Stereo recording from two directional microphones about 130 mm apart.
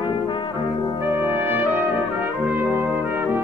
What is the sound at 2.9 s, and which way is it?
Music, 15° right (ahead or behind).